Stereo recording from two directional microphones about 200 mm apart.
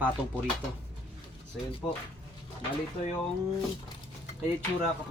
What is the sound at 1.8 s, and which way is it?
Speech, 20° left (ahead or behind).